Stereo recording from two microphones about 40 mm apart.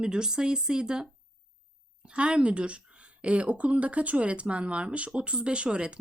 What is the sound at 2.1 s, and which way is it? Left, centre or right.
Speech, right.